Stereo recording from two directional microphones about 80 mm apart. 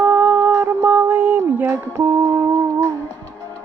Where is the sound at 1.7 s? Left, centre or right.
Right.